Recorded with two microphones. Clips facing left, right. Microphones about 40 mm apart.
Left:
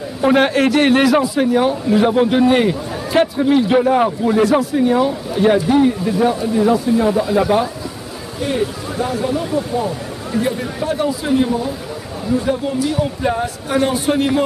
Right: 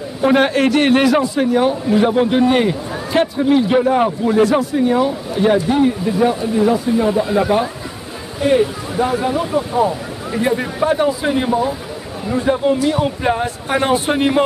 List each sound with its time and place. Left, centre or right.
0.2 s a man's voice: centre
7.1 s speech: centre
8.4 s speech: centre